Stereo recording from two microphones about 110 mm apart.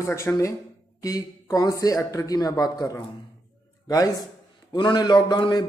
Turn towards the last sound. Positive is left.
turn(degrees=40)  # may be behind; listen again after turning